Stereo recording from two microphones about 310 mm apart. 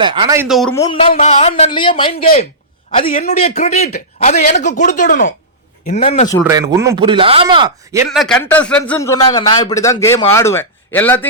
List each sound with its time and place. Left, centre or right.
0.0 s a man's voice: centre
6.4 s speech: centre
8.1 s a man's voice: centre